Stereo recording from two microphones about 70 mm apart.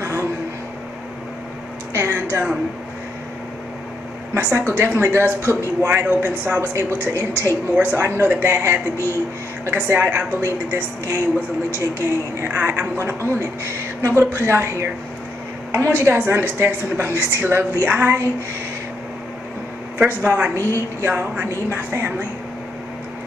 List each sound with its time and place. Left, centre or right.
0.0 s a sound: right
2.0 s a woman's voice: right
4.4 s a woman's voice: right
7.7 s a woman's voice: right
9.8 s speech: right
10.4 s a woman's voice: right
17.8 s speech: right
20.1 s speech: right
20.5 s a woman's voice: right